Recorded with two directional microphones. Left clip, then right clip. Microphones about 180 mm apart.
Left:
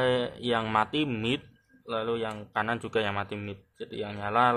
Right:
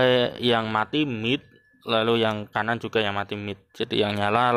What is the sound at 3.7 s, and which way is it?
Speech, 50° right (ahead or behind).